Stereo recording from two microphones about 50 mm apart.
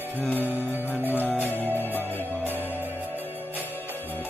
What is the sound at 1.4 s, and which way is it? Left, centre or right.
Music, left.